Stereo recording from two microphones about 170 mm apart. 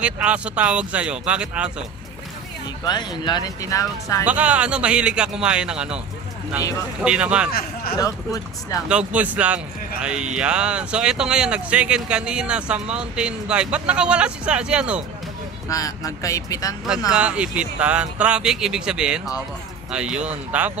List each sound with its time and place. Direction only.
0.0 s speech: 5° right (ahead or behind)
2.8 s speech: 25° left (ahead or behind)
4.3 s speech: 10° right (ahead or behind)
7.0 s speech: 5° right (ahead or behind)
8.0 s speech: 20° left (ahead or behind)
8.8 s speech: 5° right (ahead or behind)
15.7 s speech: 20° left (ahead or behind)
17.1 s speech: 5° right (ahead or behind)